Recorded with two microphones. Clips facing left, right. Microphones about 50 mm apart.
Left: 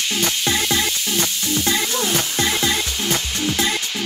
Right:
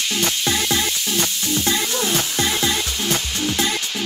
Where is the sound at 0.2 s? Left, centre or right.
Centre.